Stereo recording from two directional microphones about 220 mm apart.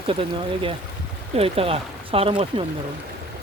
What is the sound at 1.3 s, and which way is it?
Speech, 25° right (ahead or behind).